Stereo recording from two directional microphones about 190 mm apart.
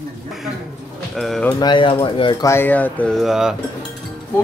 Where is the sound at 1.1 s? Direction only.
Centre (ahead or behind).